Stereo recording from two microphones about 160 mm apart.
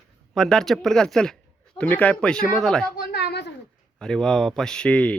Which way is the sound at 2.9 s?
90° left.